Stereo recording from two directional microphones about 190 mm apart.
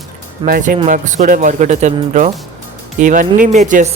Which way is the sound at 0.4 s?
50° right (ahead or behind).